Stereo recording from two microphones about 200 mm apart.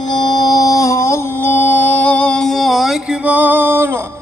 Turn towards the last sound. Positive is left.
turn(degrees=-10)  # may be behind; listen again after turning